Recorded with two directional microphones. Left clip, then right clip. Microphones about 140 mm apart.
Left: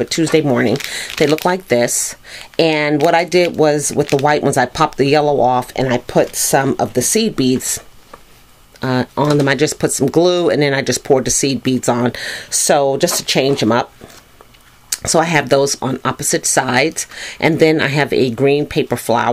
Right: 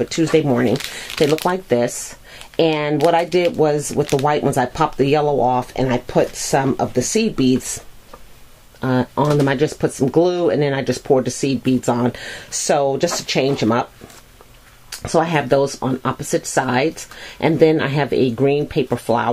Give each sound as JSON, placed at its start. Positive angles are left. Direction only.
{"t": 0.0, "sound": "speech", "side_deg": 30}
{"t": 4.0, "sound": "speech", "side_deg": 5}
{"t": 4.3, "sound": "speech", "side_deg": 30}
{"t": 8.8, "sound": "speech", "side_deg": 35}
{"t": 14.9, "sound": "speech", "side_deg": 30}